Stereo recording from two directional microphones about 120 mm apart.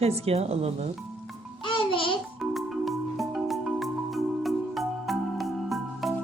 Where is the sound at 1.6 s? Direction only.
45° left (ahead or behind).